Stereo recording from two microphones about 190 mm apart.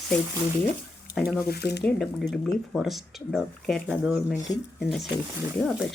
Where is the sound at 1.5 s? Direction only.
60° left (ahead or behind).